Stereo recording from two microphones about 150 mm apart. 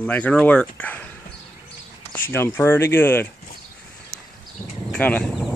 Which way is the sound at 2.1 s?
15° left (ahead or behind).